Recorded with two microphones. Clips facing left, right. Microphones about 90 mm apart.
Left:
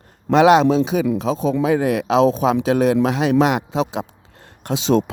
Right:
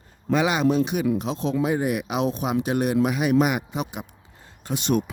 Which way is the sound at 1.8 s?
90° left.